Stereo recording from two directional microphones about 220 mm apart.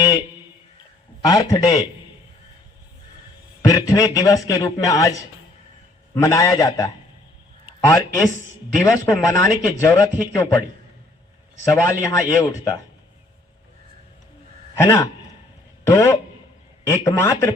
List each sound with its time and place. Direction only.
1.2 s a man's voice: 15° left (ahead or behind)
3.7 s a man's voice: 15° left (ahead or behind)
11.7 s a man's voice: 15° left (ahead or behind)
14.8 s a man's voice: 10° left (ahead or behind)